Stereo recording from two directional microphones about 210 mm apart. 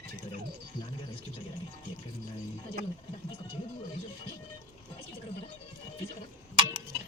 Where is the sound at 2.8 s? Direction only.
45° right (ahead or behind).